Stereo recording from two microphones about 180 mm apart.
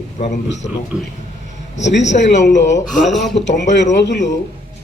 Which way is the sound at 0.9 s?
5° right (ahead or behind).